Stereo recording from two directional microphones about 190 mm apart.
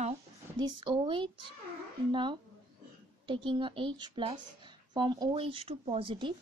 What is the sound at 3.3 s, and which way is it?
A woman's voice, 25° right (ahead or behind).